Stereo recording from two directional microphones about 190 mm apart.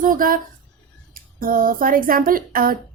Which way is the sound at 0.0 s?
45° right (ahead or behind).